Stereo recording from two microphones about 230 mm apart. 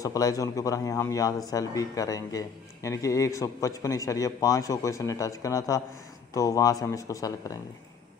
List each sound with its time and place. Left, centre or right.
0.0 s a man's voice: centre